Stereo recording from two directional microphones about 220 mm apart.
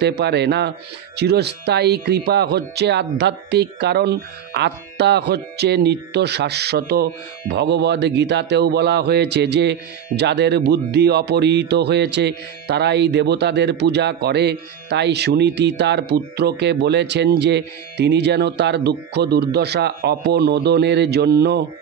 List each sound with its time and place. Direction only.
0.0 s a man's voice: 50° right (ahead or behind)